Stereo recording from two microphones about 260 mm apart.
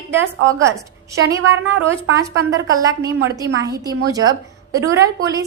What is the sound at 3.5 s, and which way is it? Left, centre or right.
Speech, right.